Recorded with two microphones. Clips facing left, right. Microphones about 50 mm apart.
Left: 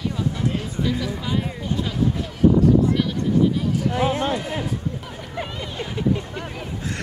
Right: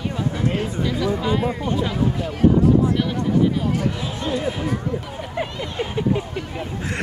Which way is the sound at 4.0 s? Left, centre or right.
Left.